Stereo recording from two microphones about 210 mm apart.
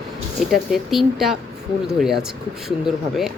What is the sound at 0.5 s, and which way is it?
Speech, centre (ahead or behind).